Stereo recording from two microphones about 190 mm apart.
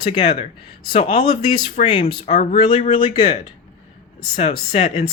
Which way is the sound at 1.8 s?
45° left (ahead or behind).